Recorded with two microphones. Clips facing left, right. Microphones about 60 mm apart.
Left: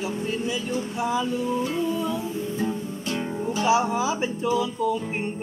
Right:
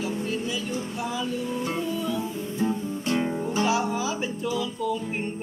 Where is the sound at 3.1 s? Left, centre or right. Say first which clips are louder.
Right 2 dB; right.